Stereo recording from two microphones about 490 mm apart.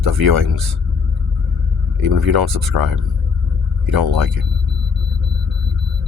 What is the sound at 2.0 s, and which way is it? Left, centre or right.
Speech, right.